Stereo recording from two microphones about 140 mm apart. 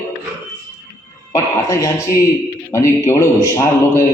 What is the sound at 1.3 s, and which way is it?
A man's voice, 25° left (ahead or behind).